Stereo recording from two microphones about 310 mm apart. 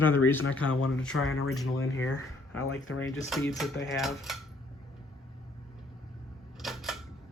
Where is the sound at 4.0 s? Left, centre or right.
Centre.